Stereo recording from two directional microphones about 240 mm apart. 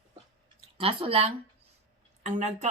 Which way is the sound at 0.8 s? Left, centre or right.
Right.